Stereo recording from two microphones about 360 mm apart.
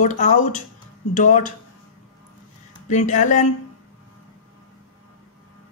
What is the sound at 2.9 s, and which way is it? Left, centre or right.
Speech, left.